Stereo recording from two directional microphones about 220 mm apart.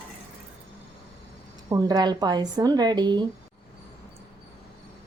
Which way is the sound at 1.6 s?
15° right (ahead or behind).